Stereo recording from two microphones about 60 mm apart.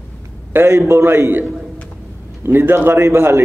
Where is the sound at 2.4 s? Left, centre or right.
Right.